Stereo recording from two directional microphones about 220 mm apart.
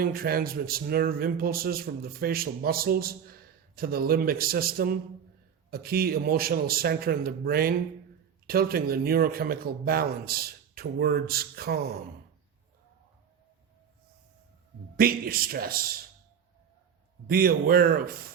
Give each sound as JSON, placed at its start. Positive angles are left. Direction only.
{"t": 0.0, "sound": "a man's voice", "side_deg": -40}
{"t": 14.9, "sound": "a man's voice", "side_deg": -40}
{"t": 17.2, "sound": "a man's voice", "side_deg": -40}